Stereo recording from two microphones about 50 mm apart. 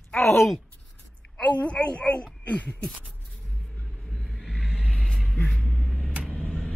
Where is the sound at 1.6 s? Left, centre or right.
Left.